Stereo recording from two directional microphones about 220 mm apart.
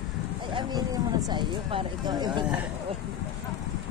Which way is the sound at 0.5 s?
15° right (ahead or behind).